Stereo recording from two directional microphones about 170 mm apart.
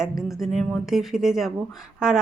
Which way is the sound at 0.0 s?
Centre (ahead or behind).